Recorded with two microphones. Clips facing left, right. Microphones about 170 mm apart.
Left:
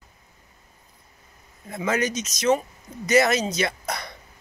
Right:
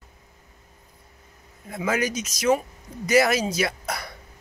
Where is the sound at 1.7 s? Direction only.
10° right (ahead or behind).